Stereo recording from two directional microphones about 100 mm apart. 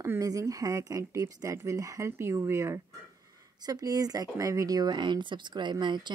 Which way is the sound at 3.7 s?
40° right (ahead or behind).